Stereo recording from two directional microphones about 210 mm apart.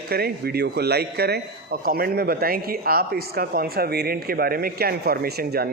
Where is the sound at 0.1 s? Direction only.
50° right (ahead or behind).